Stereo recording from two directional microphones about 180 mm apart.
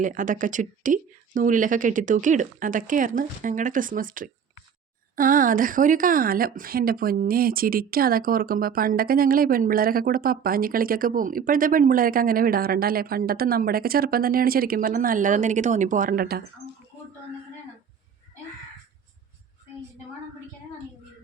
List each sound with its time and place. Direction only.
0.0 s a woman's voice: 45° right (ahead or behind)